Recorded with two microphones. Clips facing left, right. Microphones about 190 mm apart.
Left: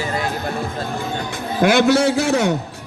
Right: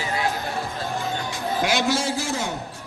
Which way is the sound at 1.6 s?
60° left (ahead or behind).